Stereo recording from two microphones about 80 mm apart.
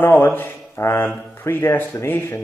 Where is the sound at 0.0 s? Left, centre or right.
Left.